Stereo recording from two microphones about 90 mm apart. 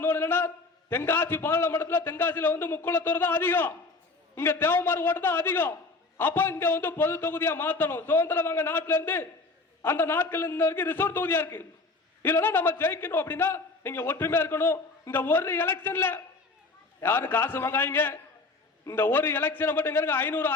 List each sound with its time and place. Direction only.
0.0 s a man's voice: 25° left (ahead or behind)